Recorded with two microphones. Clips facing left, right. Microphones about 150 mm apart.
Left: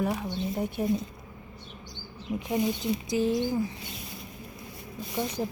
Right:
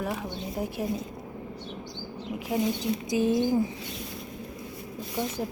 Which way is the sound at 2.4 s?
5° right (ahead or behind).